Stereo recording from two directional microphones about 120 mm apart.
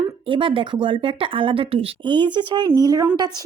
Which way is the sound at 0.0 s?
45° right (ahead or behind).